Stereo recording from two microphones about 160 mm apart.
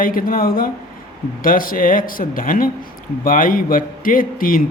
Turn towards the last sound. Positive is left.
turn(degrees=60)  # may be behind; listen again after turning